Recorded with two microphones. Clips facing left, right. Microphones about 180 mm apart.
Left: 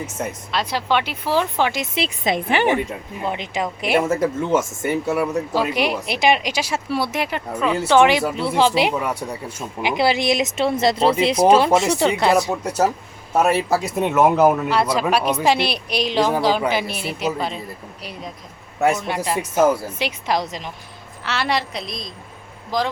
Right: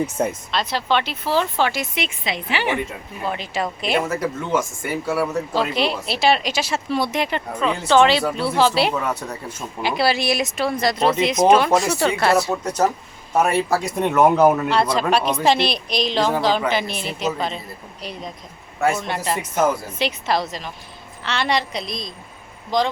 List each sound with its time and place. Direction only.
0.5 s speech: 10° left (ahead or behind)
2.2 s a woman's voice: 50° left (ahead or behind)
2.7 s speech: 20° left (ahead or behind)
4.1 s speech: 25° left (ahead or behind)
21.2 s a woman's voice: 5° left (ahead or behind)